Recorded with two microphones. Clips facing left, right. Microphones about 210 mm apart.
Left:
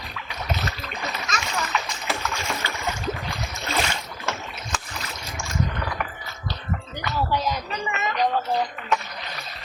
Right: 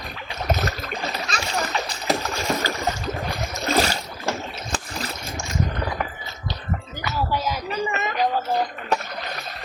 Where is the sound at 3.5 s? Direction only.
40° right (ahead or behind).